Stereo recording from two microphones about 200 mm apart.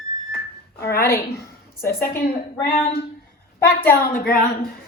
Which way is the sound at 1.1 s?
50° left (ahead or behind).